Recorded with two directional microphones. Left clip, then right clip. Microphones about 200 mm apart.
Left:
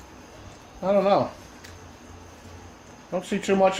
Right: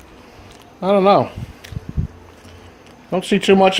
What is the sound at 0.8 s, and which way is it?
Speech, 40° right (ahead or behind).